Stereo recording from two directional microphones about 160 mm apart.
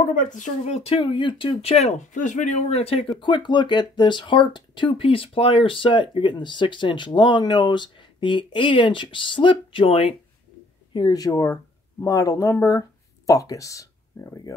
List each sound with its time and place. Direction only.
0.0 s speech: 50° left (ahead or behind); by 14.5 s 20° left (ahead or behind)